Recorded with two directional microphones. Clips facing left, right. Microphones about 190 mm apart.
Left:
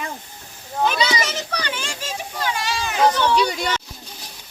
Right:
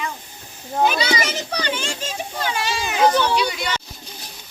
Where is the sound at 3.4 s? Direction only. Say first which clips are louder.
Left 2 dB; 40° left (ahead or behind).